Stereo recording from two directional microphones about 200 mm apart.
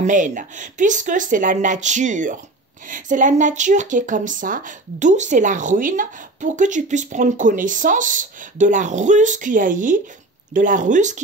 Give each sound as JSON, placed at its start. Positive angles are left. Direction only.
{"t": 0.0, "sound": "a woman's voice", "side_deg": -40}